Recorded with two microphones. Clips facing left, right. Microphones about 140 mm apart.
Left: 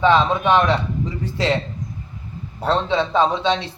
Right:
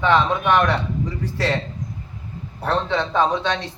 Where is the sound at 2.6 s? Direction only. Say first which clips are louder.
Left 2 dB; 15° left (ahead or behind).